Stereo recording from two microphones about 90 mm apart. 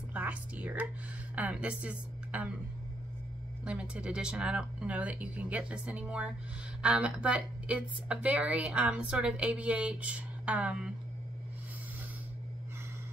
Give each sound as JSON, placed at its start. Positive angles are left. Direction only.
{"t": 0.1, "sound": "whispering", "side_deg": -15}
{"t": 1.3, "sound": "speech", "side_deg": -15}
{"t": 3.6, "sound": "a woman's voice", "side_deg": -15}